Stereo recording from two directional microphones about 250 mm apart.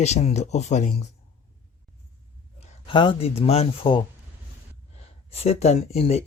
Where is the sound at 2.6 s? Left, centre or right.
Centre.